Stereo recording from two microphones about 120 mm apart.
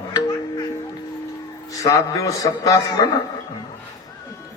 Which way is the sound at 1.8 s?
30° left (ahead or behind).